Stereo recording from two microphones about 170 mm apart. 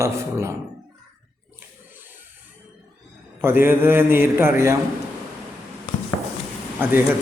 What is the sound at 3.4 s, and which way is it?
A man's voice, 15° right (ahead or behind).